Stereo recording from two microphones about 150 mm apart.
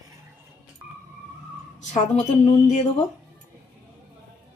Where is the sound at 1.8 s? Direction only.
55° left (ahead or behind).